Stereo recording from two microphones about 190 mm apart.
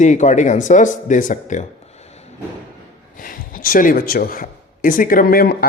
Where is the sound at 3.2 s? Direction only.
45° left (ahead or behind).